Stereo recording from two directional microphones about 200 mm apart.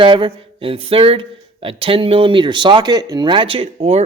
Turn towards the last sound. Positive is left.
turn(degrees=-30)  # may be behind; listen again after turning